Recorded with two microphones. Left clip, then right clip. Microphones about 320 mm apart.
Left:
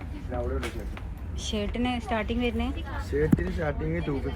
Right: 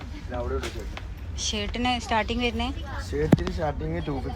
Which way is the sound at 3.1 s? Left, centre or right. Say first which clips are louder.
Right 1 dB; centre.